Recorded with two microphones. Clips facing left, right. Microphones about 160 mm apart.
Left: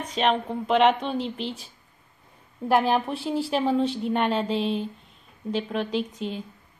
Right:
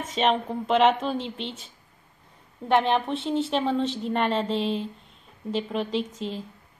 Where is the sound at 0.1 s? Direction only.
Centre (ahead or behind).